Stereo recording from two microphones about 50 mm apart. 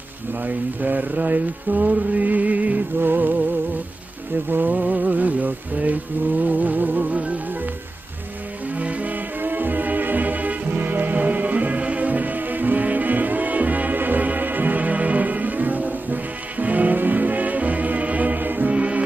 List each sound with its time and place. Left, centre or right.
0.5 s music: right
3.0 s music: right
4.5 s music: right
8.7 s music: right